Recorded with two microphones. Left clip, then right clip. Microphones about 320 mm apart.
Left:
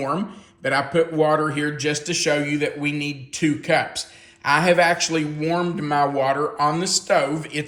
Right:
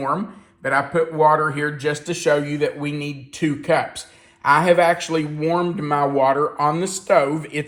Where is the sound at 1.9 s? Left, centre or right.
Centre.